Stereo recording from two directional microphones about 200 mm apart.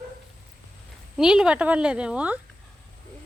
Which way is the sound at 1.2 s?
5° right (ahead or behind).